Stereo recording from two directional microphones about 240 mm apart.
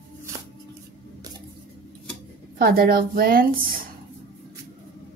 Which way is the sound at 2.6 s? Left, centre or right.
Right.